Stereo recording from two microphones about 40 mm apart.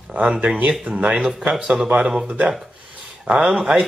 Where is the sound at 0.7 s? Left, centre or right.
Right.